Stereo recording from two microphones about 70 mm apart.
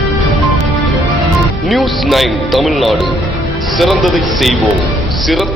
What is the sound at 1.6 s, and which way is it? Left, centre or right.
A man's voice, centre.